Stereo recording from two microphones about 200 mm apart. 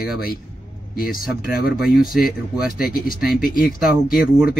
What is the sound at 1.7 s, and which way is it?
A man's voice, centre (ahead or behind).